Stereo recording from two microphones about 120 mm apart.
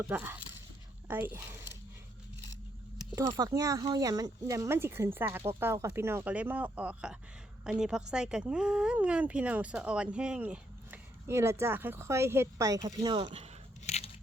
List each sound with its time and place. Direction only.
0.1 s speech: 15° right (ahead or behind)
3.3 s speech: 30° right (ahead or behind)
13.8 s biting: 65° left (ahead or behind)